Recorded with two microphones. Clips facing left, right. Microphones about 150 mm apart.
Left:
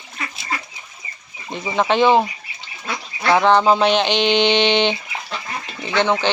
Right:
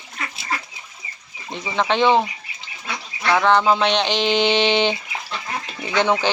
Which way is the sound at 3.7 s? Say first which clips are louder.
Left 3 dB; 10° left (ahead or behind).